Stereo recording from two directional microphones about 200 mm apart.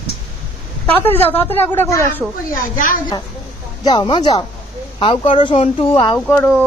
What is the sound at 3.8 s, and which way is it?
Speech, 20° left (ahead or behind).